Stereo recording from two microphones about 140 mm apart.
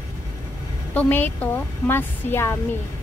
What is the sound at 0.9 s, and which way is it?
A woman's voice, 15° left (ahead or behind).